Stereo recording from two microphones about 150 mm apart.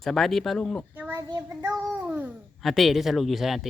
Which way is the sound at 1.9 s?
10° right (ahead or behind).